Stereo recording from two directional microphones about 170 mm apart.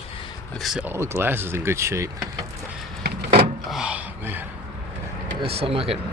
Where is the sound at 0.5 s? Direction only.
Centre (ahead or behind); by 2.2 s 15° right (ahead or behind).